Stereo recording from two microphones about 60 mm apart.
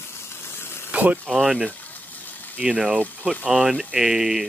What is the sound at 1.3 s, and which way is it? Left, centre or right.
Speech, centre.